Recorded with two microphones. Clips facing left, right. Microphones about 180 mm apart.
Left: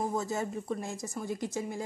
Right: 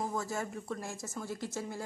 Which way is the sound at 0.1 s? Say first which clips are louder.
Left 4 dB; 20° left (ahead or behind).